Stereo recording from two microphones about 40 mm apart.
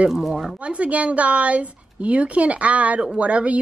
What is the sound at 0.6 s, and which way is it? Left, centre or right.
A woman's voice, right.